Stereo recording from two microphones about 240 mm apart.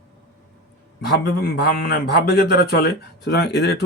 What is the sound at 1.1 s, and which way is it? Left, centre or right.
A man's voice, left.